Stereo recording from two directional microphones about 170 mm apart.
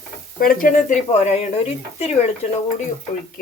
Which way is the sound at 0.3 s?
55° left (ahead or behind).